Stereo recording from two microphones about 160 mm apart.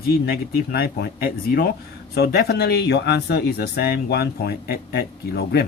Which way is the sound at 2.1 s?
90° left.